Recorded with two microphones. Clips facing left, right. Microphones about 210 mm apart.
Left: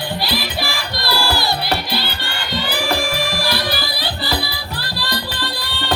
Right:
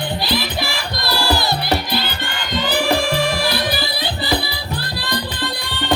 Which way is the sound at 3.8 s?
20° right (ahead or behind).